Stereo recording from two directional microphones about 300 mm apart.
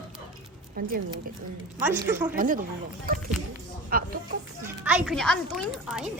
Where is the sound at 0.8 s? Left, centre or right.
Right.